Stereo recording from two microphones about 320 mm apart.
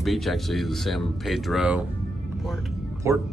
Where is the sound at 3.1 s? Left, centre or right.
Centre.